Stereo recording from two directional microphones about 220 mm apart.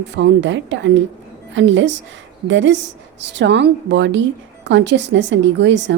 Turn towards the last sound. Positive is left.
turn(degrees=-55)  # may be behind; listen again after turning